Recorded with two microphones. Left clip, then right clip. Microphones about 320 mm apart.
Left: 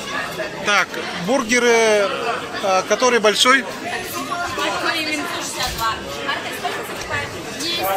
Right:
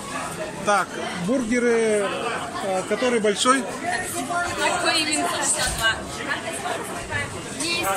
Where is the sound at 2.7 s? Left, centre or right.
Left.